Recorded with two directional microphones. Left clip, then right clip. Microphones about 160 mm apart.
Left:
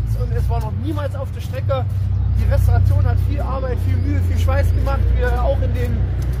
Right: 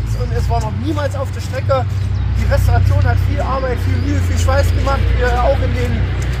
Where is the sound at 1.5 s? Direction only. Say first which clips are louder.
Right 6 dB; 15° left (ahead or behind).